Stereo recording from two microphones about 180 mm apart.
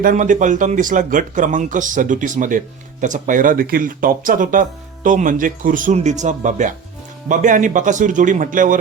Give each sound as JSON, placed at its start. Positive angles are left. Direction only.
{"t": 0.0, "sound": "speech", "side_deg": -45}